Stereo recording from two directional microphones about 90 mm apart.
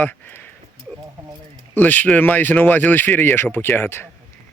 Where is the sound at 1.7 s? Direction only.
20° left (ahead or behind).